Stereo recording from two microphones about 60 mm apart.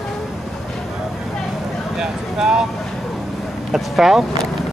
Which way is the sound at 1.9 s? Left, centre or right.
Centre.